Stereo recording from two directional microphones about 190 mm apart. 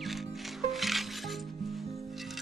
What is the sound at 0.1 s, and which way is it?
Music, centre (ahead or behind).